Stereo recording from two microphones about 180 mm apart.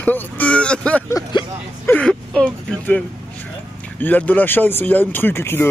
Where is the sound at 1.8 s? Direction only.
5° left (ahead or behind).